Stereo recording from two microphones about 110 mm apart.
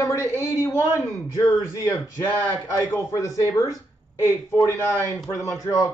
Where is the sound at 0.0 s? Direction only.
25° left (ahead or behind).